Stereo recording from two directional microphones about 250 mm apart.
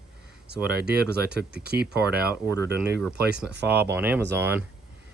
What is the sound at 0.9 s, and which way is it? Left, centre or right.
Speech, right.